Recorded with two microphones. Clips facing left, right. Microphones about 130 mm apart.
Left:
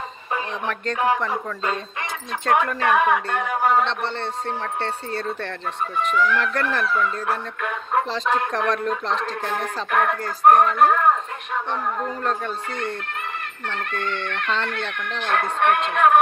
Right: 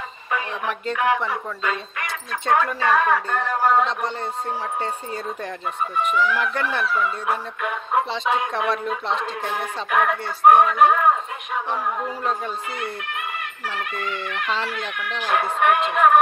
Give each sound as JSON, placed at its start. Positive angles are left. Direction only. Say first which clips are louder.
{"t": 0.9, "sound": "speech", "louder": "even", "side_deg": 35}
{"t": 2.5, "sound": "a woman's voice", "louder": "even", "side_deg": 15}
{"t": 4.8, "sound": "speech", "louder": "left 1 dB", "side_deg": -10}